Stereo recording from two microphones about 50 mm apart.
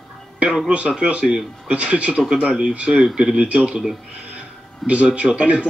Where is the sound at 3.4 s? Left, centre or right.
Right.